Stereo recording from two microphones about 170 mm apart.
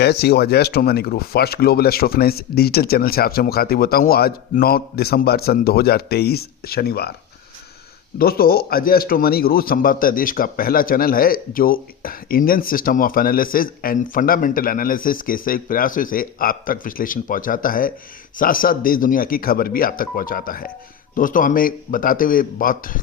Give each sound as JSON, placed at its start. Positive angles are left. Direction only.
{"t": 0.0, "sound": "a man's voice", "side_deg": 70}
{"t": 8.2, "sound": "a man's voice", "side_deg": 60}